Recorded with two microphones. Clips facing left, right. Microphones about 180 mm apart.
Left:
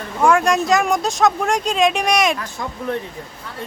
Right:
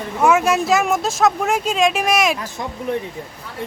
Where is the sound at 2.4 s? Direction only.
20° right (ahead or behind).